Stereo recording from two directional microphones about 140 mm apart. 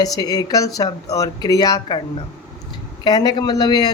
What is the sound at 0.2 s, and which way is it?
Speech, 30° left (ahead or behind).